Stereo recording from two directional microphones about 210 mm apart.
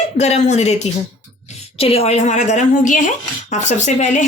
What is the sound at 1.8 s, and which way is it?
A woman's voice, 30° left (ahead or behind).